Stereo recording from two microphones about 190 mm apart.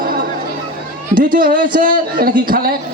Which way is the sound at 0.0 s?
50° right (ahead or behind).